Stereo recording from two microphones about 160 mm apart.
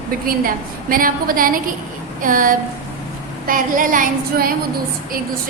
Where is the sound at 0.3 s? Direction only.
60° right (ahead or behind).